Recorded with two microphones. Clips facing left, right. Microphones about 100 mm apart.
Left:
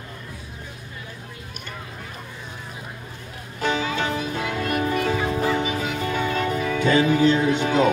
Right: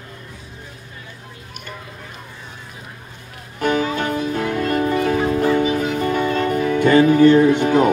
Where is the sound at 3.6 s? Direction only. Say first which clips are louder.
Right 4 dB; 50° right (ahead or behind).